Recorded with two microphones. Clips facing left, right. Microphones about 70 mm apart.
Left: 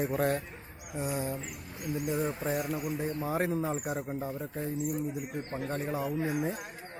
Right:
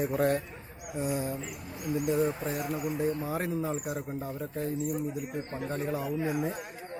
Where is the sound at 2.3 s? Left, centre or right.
Left.